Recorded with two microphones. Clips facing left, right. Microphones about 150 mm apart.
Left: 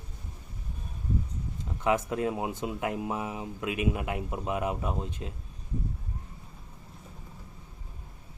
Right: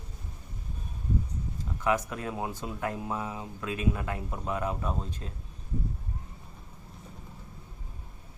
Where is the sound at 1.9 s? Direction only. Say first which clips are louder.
Left 2 dB; 20° left (ahead or behind).